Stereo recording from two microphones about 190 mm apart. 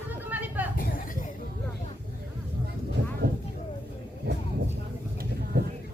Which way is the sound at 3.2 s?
65° right (ahead or behind).